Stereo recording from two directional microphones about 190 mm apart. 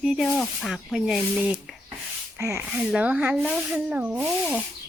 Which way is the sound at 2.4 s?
15° right (ahead or behind).